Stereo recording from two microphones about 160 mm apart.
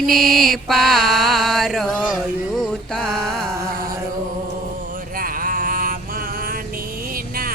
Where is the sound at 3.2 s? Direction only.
5° left (ahead or behind).